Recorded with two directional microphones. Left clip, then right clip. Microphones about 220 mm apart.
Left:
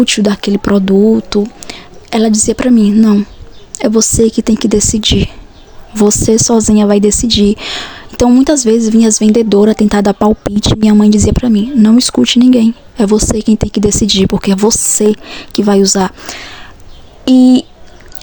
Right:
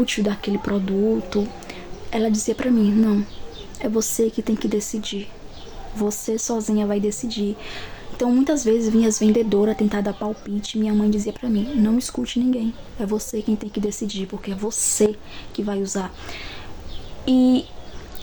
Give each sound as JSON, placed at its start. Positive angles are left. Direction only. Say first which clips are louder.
{"t": 0.0, "sound": "speech", "louder": "left 11 dB", "side_deg": 45}